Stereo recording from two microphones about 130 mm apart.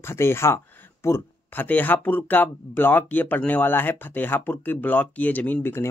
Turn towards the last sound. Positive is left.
turn(degrees=15)  # may be behind; listen again after turning